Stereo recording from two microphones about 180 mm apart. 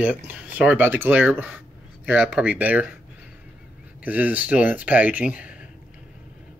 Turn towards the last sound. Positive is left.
turn(degrees=-5)  # may be behind; listen again after turning